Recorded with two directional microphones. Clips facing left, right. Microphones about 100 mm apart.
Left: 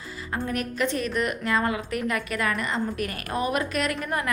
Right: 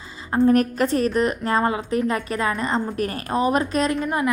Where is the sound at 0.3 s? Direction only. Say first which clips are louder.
Right 12 dB; 35° right (ahead or behind).